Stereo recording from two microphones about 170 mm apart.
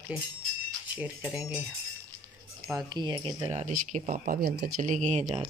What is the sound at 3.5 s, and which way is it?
Speech, 45° right (ahead or behind).